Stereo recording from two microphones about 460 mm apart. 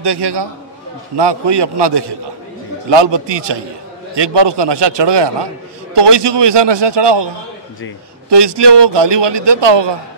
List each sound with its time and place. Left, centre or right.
0.0 s a man's voice: right
8.3 s a man's voice: right